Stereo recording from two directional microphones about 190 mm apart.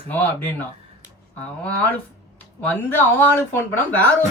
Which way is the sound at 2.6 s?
10° left (ahead or behind).